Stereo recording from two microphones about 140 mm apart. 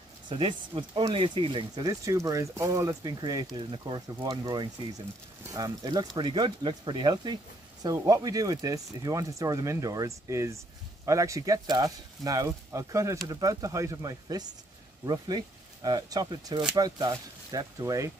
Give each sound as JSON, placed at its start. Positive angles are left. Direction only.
{"t": 0.3, "sound": "speech", "side_deg": -35}